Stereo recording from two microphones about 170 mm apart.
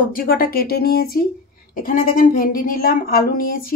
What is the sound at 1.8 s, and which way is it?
Speech, 50° left (ahead or behind).